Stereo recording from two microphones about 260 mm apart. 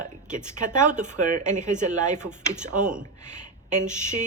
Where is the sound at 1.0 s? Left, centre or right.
Right.